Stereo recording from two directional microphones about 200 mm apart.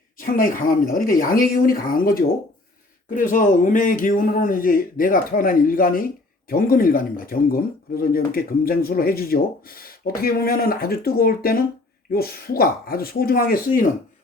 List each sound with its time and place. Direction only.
0.2 s speech: 45° left (ahead or behind)
3.2 s speech: 40° left (ahead or behind)